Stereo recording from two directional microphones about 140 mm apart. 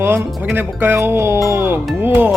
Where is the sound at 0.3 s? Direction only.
Centre (ahead or behind).